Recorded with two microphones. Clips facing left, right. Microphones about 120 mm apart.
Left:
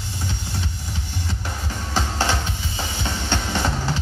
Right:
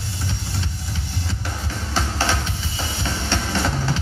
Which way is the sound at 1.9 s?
15° left (ahead or behind).